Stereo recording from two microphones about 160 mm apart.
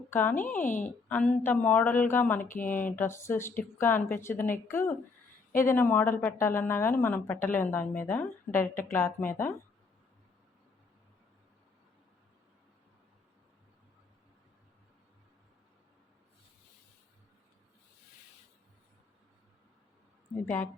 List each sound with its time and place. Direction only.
0.1 s speech: 10° left (ahead or behind)
0.6 s a woman's voice: 50° left (ahead or behind)
1.0 s speech: 10° left (ahead or behind)
2.4 s speech: 55° left (ahead or behind)
2.6 s speech: 10° left (ahead or behind)
20.4 s speech: 15° left (ahead or behind)